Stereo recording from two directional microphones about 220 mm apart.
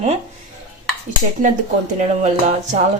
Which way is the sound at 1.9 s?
30° right (ahead or behind).